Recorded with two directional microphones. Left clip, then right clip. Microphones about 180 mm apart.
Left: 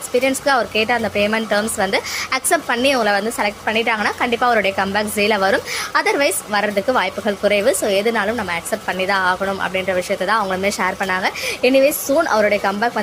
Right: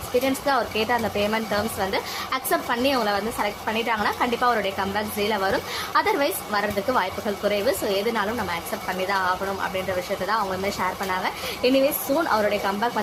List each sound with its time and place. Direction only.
0.2 s speech: 20° left (ahead or behind)